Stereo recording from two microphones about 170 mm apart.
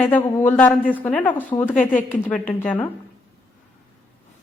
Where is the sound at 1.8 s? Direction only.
50° left (ahead or behind).